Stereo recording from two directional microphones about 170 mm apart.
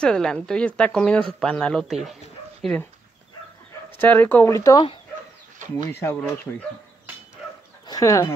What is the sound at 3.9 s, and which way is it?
Speech, 10° left (ahead or behind).